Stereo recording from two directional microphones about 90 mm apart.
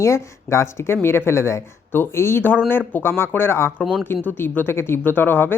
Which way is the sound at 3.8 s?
10° right (ahead or behind).